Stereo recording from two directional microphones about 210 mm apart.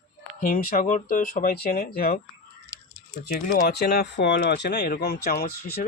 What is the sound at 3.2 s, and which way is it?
Speech, 50° left (ahead or behind).